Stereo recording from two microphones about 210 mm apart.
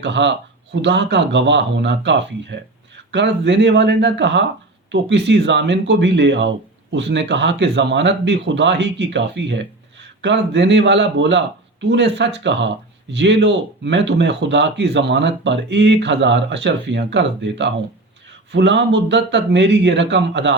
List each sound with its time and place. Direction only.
0.0 s speech: 55° right (ahead or behind)